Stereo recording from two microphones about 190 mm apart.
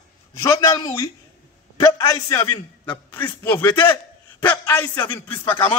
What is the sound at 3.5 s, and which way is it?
A man's voice, 10° left (ahead or behind).